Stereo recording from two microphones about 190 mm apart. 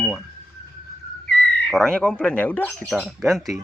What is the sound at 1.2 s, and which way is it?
Speech, 5° left (ahead or behind).